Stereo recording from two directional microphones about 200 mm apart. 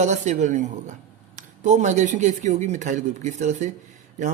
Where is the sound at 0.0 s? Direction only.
40° right (ahead or behind).